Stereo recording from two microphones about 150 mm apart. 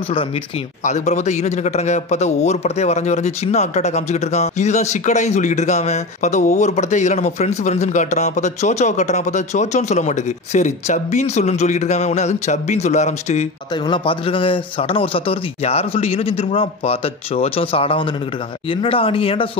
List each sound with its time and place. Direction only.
0.8 s speech: 50° left (ahead or behind)
13.8 s a man's voice: 35° left (ahead or behind)